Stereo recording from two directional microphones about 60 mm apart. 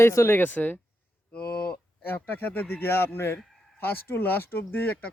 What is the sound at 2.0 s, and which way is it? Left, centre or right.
Speech, left.